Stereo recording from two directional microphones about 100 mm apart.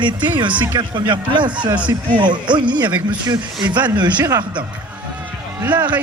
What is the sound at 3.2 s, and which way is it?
A man's voice, 50° right (ahead or behind).